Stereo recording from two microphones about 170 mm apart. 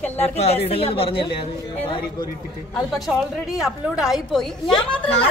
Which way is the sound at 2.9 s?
Centre (ahead or behind).